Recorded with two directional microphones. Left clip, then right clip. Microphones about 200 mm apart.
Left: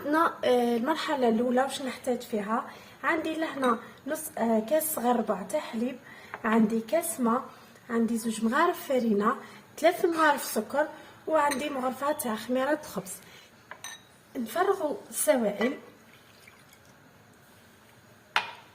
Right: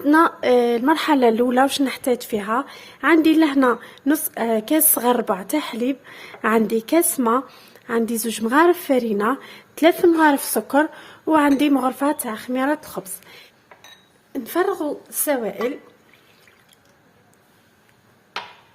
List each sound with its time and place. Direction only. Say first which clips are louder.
0.1 s a woman's voice: right 9 dB; 40° right (ahead or behind)
14.3 s a woman's voice: right 5 dB; 55° right (ahead or behind)